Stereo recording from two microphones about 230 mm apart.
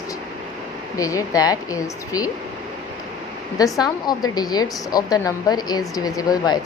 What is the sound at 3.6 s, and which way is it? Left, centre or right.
Speech, centre.